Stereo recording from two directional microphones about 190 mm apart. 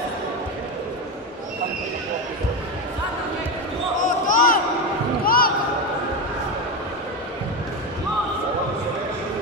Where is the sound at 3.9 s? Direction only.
45° left (ahead or behind).